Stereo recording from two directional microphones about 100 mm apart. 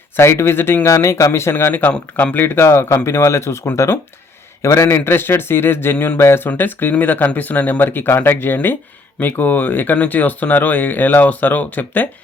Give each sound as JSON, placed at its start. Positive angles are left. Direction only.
{"t": 0.2, "sound": "speech", "side_deg": 25}